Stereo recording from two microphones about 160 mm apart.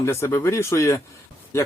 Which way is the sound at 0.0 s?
15° left (ahead or behind).